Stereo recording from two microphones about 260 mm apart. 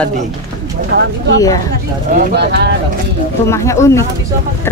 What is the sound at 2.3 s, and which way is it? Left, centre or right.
Speech, right.